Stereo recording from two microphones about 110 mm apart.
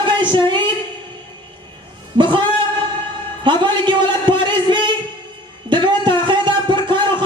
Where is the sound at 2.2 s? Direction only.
45° right (ahead or behind).